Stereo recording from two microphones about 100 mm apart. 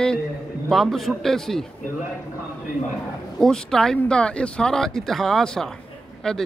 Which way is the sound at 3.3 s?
5° left (ahead or behind).